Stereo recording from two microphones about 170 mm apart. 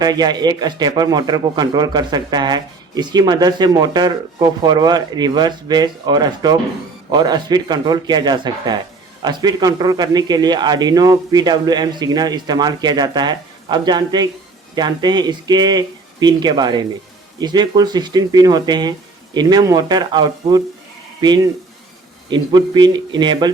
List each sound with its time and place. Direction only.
0.0 s speech: 25° right (ahead or behind)